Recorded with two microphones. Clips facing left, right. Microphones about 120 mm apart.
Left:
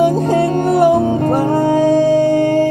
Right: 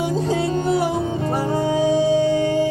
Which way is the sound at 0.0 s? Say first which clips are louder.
Left 8 dB; 55° left (ahead or behind).